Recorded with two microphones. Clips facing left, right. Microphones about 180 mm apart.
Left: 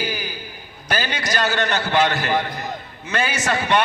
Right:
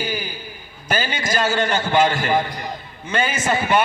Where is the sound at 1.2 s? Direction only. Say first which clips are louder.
Right 2 dB; 10° right (ahead or behind).